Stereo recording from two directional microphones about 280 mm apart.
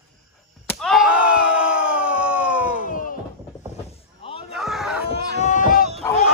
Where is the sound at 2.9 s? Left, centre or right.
Left.